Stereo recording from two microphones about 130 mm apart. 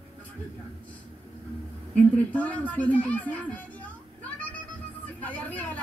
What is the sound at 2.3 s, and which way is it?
Speech, 10° left (ahead or behind).